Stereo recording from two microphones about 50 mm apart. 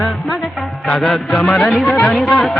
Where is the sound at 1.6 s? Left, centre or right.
Centre.